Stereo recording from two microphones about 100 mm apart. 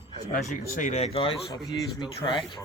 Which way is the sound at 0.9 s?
75° left (ahead or behind).